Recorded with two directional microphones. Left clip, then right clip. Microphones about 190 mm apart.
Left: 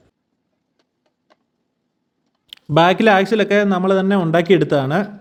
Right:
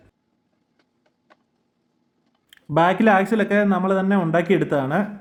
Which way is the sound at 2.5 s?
25° left (ahead or behind).